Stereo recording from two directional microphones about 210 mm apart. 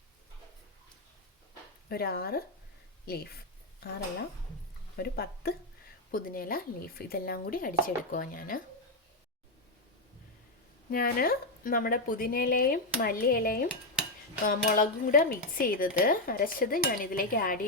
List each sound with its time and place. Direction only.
1.9 s speech: 45° left (ahead or behind)
4.9 s speech: 50° left (ahead or behind)
10.9 s speech: 45° left (ahead or behind)